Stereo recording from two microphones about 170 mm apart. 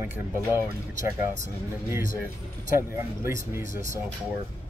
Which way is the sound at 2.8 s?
15° right (ahead or behind).